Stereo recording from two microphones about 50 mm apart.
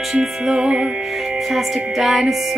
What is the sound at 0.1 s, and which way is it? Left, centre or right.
Music, centre.